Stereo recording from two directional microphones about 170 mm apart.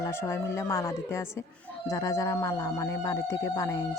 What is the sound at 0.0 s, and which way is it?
A man's voice, 15° left (ahead or behind).